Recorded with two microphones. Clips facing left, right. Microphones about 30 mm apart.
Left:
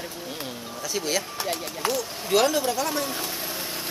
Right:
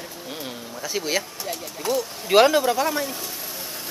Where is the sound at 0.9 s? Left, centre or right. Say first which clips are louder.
Right 2 dB; centre.